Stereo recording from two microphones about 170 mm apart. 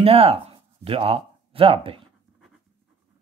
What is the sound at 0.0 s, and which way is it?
Speech, 35° right (ahead or behind).